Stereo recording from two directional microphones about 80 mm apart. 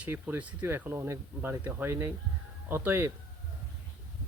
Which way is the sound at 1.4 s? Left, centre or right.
Right.